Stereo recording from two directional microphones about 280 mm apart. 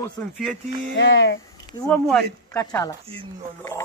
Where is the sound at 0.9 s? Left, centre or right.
Left.